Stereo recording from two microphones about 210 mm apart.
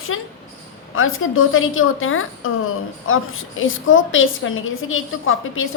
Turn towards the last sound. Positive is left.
turn(degrees=70)  # may be behind; listen again after turning